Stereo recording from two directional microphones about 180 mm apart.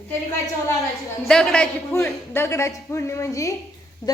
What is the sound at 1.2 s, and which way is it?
Speech, 5° left (ahead or behind).